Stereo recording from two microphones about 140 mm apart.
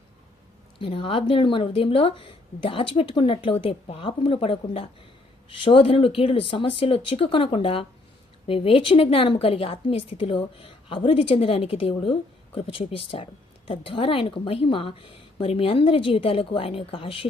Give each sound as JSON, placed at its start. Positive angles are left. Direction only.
{"t": 0.8, "sound": "speech", "side_deg": 40}